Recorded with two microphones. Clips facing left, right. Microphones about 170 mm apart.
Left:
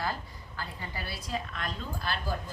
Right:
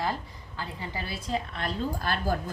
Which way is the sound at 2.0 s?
45° right (ahead or behind).